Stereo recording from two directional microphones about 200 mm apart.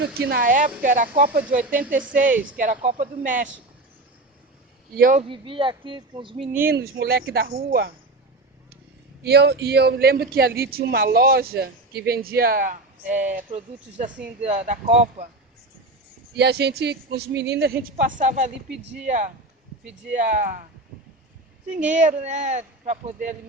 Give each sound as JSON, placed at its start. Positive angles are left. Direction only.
{"t": 0.2, "sound": "speech", "side_deg": -50}
{"t": 4.9, "sound": "speech", "side_deg": -45}
{"t": 5.3, "sound": "speech", "side_deg": -25}
{"t": 6.7, "sound": "speech", "side_deg": -50}
{"t": 9.2, "sound": "speech", "side_deg": -55}
{"t": 16.4, "sound": "a woman's voice", "side_deg": -55}
{"t": 21.7, "sound": "speech", "side_deg": -40}